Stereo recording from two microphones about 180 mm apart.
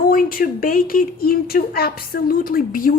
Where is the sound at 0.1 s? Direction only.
50° left (ahead or behind).